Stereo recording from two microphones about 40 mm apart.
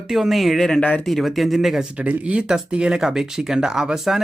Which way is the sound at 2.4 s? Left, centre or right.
Right.